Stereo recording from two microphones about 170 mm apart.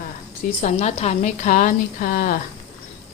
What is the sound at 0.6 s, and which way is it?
A woman's voice, 40° left (ahead or behind).